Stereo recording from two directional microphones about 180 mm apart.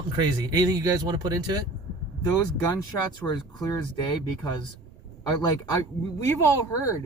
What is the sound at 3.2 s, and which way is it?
Speech, 20° left (ahead or behind).